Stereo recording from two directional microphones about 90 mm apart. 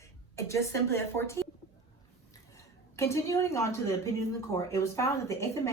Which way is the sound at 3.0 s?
35° left (ahead or behind).